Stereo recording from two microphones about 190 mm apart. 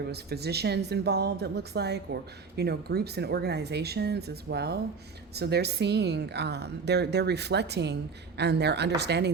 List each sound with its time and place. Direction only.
0.1 s a woman's voice: 60° right (ahead or behind)